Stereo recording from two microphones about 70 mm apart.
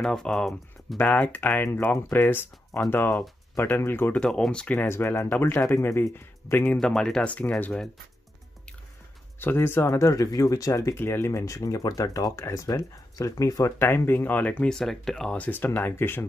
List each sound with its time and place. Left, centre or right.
0.0 s speech: centre
0.9 s speech: left
4.1 s speech: centre
4.7 s speech: left
6.8 s speech: centre
9.4 s speech: left
11.0 s speech: left
13.7 s speech: left
14.7 s speech: centre
15.3 s speech: left